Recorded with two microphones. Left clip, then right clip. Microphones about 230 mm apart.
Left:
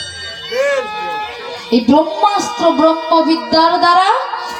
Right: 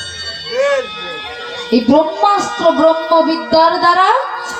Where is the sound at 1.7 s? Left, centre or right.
Left.